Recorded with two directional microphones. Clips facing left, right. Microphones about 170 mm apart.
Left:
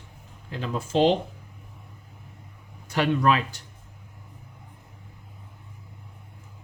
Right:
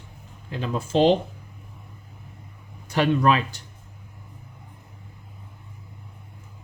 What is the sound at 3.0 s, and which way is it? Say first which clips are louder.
Speech: right 2 dB; 25° right (ahead or behind).